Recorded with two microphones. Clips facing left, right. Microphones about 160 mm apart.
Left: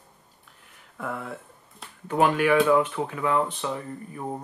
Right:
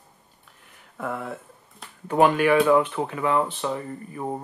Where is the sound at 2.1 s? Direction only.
15° right (ahead or behind).